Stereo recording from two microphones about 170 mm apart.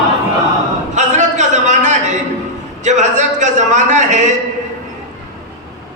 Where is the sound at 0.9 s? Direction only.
45° right (ahead or behind).